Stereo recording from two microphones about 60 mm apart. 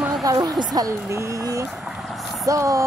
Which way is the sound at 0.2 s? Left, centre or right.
Right.